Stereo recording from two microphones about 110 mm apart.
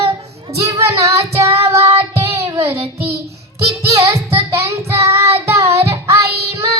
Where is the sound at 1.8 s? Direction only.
65° right (ahead or behind).